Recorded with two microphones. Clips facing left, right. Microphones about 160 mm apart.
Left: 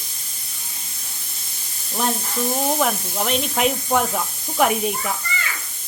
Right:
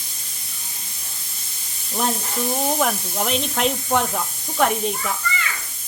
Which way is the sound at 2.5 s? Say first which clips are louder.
Even; centre (ahead or behind).